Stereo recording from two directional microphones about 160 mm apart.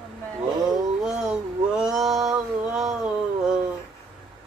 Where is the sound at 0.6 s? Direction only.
25° right (ahead or behind).